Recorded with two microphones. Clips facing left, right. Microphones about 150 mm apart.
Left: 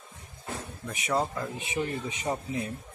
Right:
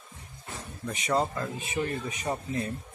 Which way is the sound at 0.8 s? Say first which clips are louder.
Right 2 dB; 5° left (ahead or behind).